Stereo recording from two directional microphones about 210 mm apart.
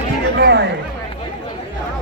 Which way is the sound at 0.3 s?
55° right (ahead or behind).